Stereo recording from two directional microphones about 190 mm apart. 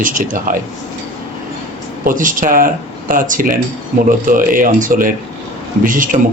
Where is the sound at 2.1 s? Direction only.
45° right (ahead or behind).